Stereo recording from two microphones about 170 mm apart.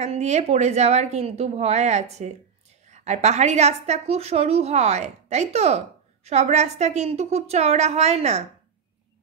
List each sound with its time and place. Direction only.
0.0 s a woman's voice: 40° right (ahead or behind)